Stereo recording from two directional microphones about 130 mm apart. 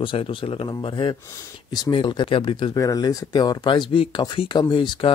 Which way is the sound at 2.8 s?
30° left (ahead or behind).